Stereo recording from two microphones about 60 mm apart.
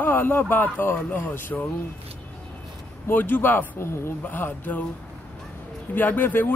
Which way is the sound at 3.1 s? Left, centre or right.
Left.